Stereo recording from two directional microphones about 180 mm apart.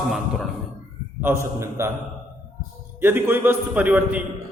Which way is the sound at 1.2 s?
15° right (ahead or behind).